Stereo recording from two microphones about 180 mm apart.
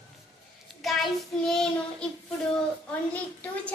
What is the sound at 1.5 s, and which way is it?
Speech, 5° left (ahead or behind).